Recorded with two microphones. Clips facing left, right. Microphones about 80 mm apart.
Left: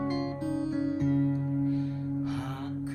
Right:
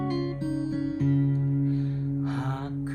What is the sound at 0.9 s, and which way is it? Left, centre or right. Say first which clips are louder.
Music: right 1 dB; left.